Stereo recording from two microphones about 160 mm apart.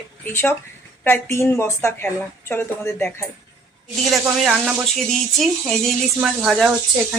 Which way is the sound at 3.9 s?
Centre (ahead or behind).